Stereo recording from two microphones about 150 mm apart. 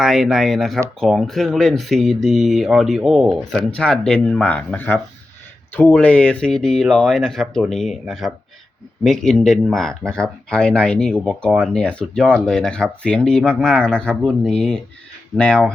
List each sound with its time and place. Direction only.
0.0 s speech: centre (ahead or behind)